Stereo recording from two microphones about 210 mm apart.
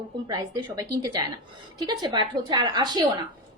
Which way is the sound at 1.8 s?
20° right (ahead or behind).